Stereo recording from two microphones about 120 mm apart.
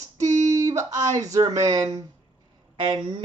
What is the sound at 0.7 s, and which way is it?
Speech, 25° right (ahead or behind).